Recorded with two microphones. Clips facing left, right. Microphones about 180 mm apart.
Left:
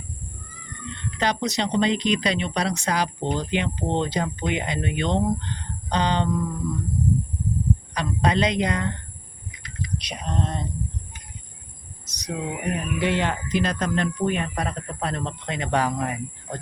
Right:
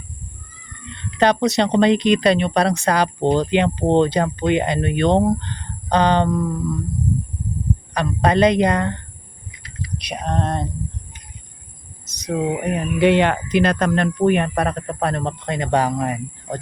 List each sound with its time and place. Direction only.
1.2 s speech: 65° right (ahead or behind)
7.9 s speech: 50° right (ahead or behind)
10.0 s a sound: 60° right (ahead or behind)
12.0 s speech: 50° right (ahead or behind)